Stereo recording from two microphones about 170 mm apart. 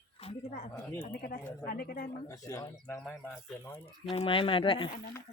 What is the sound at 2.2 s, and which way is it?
Speech, 20° left (ahead or behind).